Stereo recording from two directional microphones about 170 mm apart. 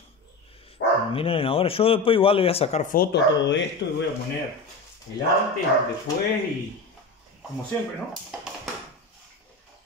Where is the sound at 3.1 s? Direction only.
90° left.